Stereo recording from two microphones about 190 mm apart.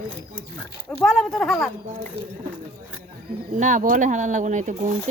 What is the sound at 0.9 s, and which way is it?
Speech, centre (ahead or behind).